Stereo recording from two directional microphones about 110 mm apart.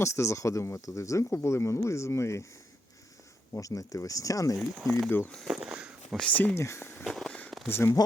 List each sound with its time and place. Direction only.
0.0 s speech: 25° left (ahead or behind)
3.5 s speech: 30° left (ahead or behind)
4.5 s speech: centre (ahead or behind)
5.0 s speech: 20° left (ahead or behind)
5.3 s speech: centre (ahead or behind)
6.1 s speech: 10° left (ahead or behind)
7.0 s fireworks: 5° left (ahead or behind)
7.7 s speech: 20° left (ahead or behind)